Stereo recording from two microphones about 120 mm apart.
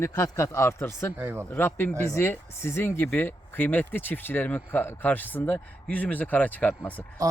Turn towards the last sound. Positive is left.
turn(degrees=15)  # may be behind; listen again after turning